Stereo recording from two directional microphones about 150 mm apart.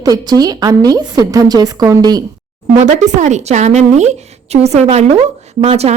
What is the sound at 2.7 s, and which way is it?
A woman's voice, 55° right (ahead or behind).